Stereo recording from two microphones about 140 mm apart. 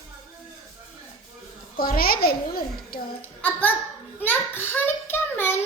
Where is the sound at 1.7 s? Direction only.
90° left.